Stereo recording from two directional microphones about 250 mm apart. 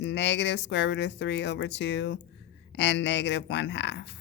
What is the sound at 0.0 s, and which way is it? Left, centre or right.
Speech, left.